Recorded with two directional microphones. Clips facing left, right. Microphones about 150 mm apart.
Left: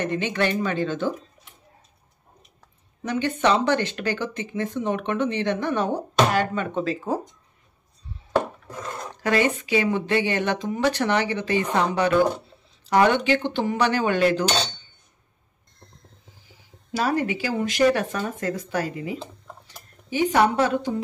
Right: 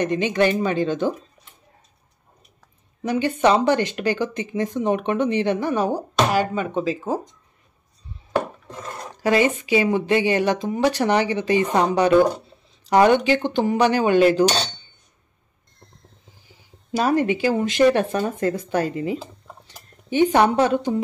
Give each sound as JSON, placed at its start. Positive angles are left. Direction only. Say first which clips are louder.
{"t": 0.0, "sound": "speech", "louder": "right 5 dB", "side_deg": -15}
{"t": 3.0, "sound": "speech", "louder": "right 4 dB", "side_deg": -10}
{"t": 8.6, "sound": "a sound", "louder": "left 1 dB", "side_deg": -25}
{"t": 9.1, "sound": "speech", "louder": "right 3 dB", "side_deg": -15}
{"t": 16.9, "sound": "speech", "louder": "right 4 dB", "side_deg": -20}